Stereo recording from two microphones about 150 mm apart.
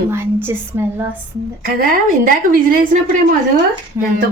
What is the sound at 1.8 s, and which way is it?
A woman's voice, 65° right (ahead or behind).